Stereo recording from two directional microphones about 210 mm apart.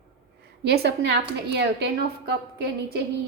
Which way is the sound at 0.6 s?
50° right (ahead or behind).